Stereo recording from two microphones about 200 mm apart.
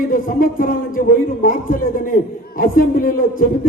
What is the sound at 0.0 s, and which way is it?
A man's voice, 45° left (ahead or behind).